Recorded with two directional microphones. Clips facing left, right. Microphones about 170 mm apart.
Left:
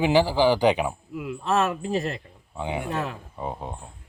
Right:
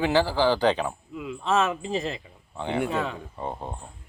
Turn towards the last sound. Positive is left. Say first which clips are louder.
# left 1 dB
turn(degrees=0)  # may be behind; listen again after turning